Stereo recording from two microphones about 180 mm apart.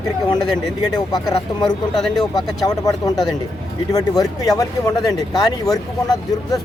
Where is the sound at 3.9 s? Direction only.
20° left (ahead or behind).